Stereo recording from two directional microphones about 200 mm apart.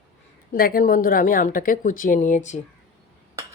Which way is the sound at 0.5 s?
45° left (ahead or behind).